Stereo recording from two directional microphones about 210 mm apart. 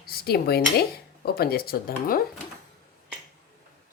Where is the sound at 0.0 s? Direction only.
45° left (ahead or behind).